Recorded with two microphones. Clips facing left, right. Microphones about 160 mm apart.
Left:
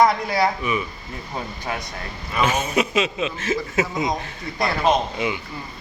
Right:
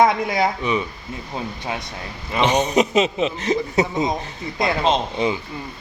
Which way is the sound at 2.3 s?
20° right (ahead or behind).